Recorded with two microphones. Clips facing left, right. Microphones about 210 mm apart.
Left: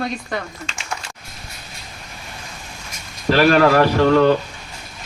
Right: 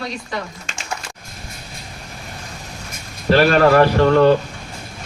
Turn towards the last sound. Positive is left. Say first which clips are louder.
# right 1 dB
turn(degrees=-50)  # may be behind; listen again after turning